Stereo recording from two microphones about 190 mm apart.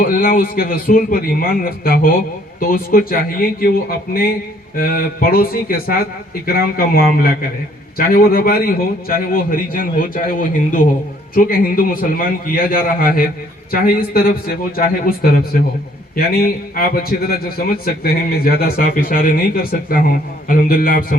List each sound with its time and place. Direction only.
0.0 s a man's voice: 50° left (ahead or behind)